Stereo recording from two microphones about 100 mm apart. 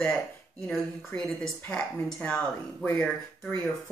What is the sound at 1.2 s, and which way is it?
A woman's voice, 5° left (ahead or behind).